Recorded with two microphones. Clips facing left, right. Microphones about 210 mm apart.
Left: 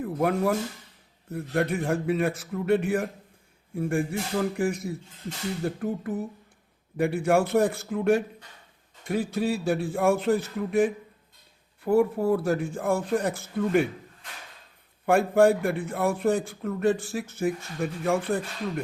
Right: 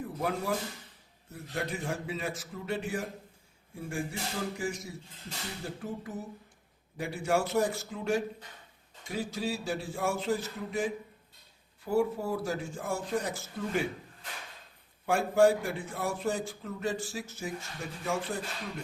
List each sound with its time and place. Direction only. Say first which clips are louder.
0.0 s speech: left 8 dB; 60° left (ahead or behind)
15.0 s speech: left 5 dB; 60° left (ahead or behind)